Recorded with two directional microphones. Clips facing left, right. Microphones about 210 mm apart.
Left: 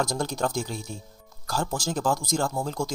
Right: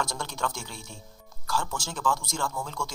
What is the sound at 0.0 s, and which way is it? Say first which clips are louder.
Speech: left 6 dB; 40° left (ahead or behind).